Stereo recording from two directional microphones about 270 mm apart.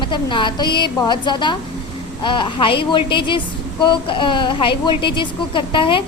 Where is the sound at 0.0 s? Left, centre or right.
Centre.